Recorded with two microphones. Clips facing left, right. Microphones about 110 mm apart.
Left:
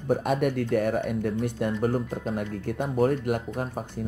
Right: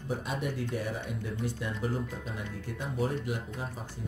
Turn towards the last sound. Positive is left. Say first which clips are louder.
# left 8 dB
turn(degrees=60)  # may be behind; listen again after turning